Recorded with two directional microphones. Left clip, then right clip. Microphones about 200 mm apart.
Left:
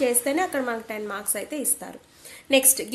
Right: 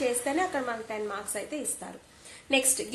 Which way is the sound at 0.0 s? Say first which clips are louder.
Left 5 dB; 40° left (ahead or behind).